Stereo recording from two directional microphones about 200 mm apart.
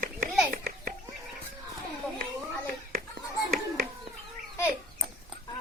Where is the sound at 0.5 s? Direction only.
45° right (ahead or behind).